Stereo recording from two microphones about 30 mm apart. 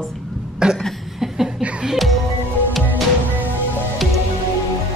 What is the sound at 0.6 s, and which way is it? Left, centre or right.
Speech, right.